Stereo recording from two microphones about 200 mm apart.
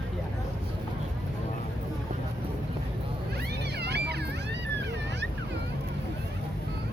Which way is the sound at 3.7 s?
55° right (ahead or behind).